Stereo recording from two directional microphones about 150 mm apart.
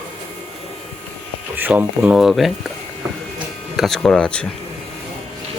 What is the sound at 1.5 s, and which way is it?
Speech, 10° right (ahead or behind).